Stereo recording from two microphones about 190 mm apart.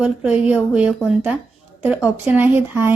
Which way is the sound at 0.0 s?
5° right (ahead or behind).